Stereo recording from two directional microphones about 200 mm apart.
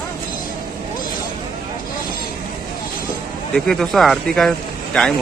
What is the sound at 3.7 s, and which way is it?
Speech, centre (ahead or behind).